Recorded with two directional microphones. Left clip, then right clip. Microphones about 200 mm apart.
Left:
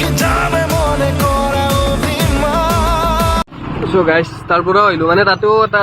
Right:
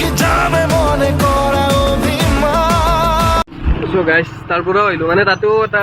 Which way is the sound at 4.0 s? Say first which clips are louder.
Left 1 dB; 20° left (ahead or behind).